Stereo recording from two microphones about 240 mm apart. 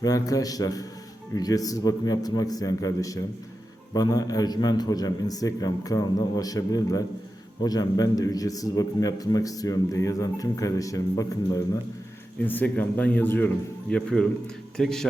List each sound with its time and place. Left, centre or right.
0.0 s a man's voice: centre